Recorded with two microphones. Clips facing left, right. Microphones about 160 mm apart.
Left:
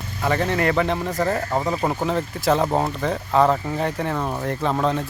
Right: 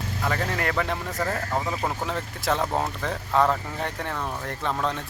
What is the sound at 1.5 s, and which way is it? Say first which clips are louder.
Speech: left 4 dB; 15° left (ahead or behind).